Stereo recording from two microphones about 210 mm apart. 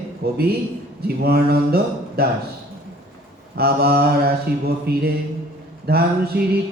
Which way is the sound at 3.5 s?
50° right (ahead or behind).